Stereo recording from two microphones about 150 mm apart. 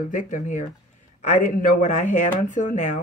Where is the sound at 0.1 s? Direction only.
55° left (ahead or behind).